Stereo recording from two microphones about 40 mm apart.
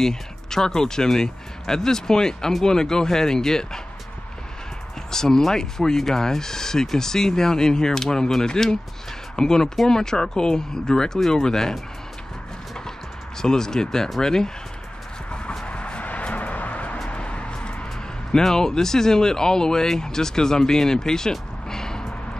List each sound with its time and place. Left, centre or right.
0.0 s speech: centre
5.1 s speech: centre
13.4 s speech: centre
15.6 s a sound: left
18.3 s speech: centre